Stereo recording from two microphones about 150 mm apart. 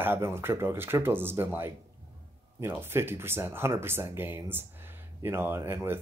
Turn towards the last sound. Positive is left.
turn(degrees=-15)  # may be behind; listen again after turning